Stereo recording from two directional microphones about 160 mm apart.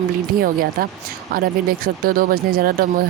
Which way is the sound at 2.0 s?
65° right (ahead or behind).